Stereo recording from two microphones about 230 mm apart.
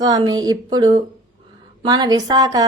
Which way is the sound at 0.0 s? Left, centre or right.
Centre.